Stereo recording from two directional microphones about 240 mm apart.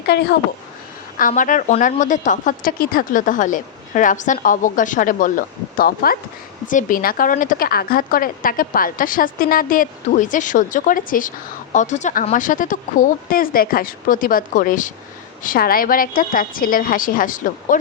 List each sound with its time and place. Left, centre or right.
0.0 s a woman's voice: left